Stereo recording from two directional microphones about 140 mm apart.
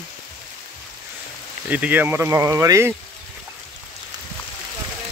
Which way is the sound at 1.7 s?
10° right (ahead or behind).